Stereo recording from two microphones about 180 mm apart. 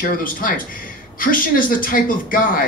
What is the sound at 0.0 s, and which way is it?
A man's voice, 50° left (ahead or behind).